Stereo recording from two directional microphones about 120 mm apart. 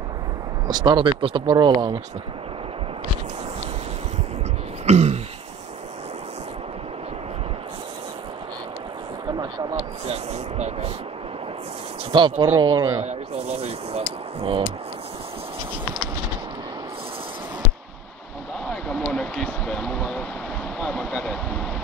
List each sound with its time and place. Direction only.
0.7 s speech: 35° right (ahead or behind)
4.8 s throat clearing: 65° right (ahead or behind)
10.0 s speech: 65° right (ahead or behind)
12.1 s speech: 45° right (ahead or behind)
13.0 s speech: 60° right (ahead or behind)
18.7 s speech: 5° left (ahead or behind)